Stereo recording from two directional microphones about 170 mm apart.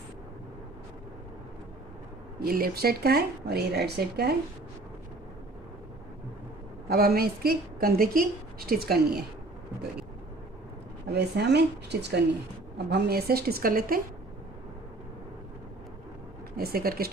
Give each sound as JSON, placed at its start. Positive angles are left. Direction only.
{"t": 2.4, "sound": "speech", "side_deg": -60}
{"t": 6.8, "sound": "a woman's voice", "side_deg": -60}
{"t": 11.1, "sound": "a woman's voice", "side_deg": -80}
{"t": 16.6, "sound": "a woman's voice", "side_deg": -65}